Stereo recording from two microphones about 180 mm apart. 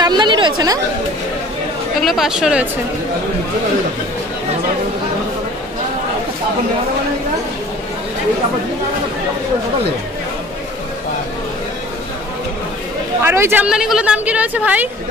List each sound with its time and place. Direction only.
0.0 s chatter: 25° right (ahead or behind)
2.0 s speech: centre (ahead or behind)
13.2 s a woman's voice: 15° right (ahead or behind)